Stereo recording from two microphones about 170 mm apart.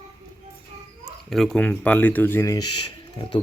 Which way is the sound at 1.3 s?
5° left (ahead or behind).